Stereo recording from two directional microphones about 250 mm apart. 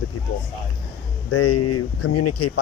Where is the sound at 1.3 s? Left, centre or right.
Left.